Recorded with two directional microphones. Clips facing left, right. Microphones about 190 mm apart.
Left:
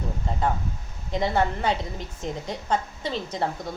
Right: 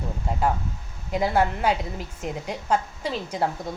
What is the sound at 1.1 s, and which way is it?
A woman's voice, 5° right (ahead or behind).